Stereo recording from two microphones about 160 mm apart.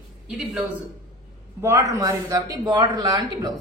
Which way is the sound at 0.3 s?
5° right (ahead or behind).